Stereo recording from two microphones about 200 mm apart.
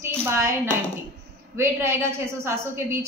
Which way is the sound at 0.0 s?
15° right (ahead or behind).